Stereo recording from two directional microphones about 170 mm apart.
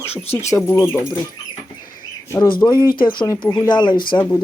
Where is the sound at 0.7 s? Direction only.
15° left (ahead or behind).